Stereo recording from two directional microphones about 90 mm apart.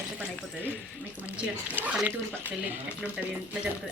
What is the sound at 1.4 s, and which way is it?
Speech, 10° right (ahead or behind).